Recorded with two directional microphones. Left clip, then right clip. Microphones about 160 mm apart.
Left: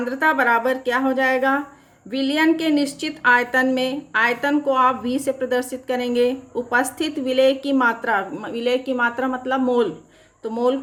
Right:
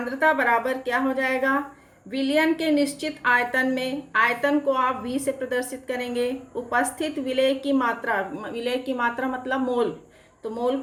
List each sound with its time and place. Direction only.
0.0 s a woman's voice: 45° left (ahead or behind)